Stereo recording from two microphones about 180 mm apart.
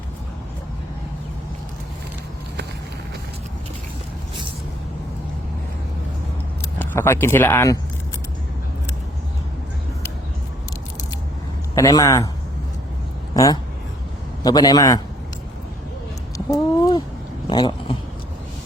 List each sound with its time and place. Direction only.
6.7 s speech: 15° left (ahead or behind)
11.7 s a man's voice: 20° left (ahead or behind)
13.3 s a man's voice: 20° left (ahead or behind)
16.5 s a sound: 20° left (ahead or behind)